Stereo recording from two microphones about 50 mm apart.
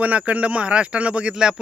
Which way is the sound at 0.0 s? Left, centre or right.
Right.